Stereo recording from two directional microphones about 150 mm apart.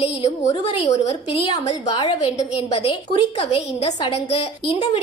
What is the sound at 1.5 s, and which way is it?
Speech, 30° left (ahead or behind).